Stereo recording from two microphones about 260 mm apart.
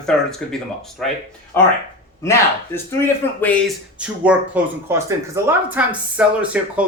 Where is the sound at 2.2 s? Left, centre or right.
Centre.